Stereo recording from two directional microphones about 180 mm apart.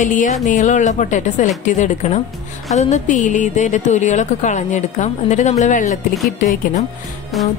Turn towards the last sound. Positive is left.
turn(degrees=0)  # may be behind; listen again after turning